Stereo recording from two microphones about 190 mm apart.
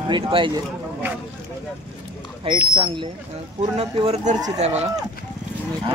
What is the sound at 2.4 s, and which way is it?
A man's voice, 25° right (ahead or behind).